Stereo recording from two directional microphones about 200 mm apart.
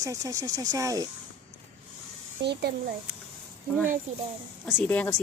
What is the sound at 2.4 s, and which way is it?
Speech, 55° right (ahead or behind).